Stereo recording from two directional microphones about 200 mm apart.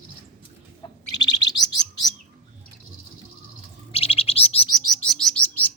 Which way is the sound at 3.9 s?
30° left (ahead or behind).